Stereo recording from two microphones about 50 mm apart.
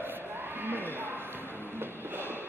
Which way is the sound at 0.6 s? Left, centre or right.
Right.